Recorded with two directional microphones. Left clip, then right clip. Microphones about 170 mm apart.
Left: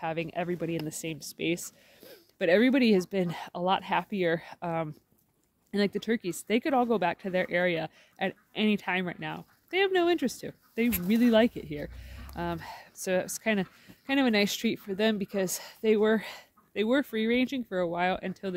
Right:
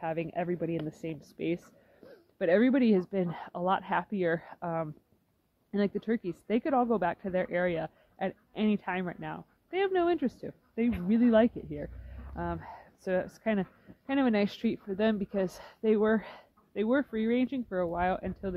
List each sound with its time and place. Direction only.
0.0 s speech: 15° left (ahead or behind)